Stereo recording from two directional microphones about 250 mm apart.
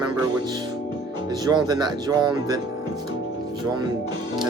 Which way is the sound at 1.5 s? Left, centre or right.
Centre.